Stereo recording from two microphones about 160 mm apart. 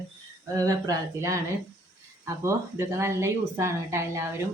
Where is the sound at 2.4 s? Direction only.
15° right (ahead or behind).